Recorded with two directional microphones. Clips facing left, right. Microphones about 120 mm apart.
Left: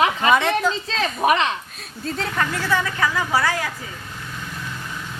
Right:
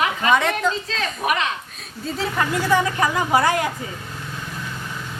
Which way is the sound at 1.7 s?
Centre (ahead or behind).